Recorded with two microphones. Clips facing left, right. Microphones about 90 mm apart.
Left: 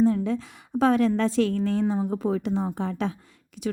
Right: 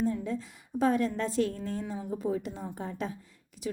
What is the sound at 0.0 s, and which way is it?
A woman's voice, 85° left.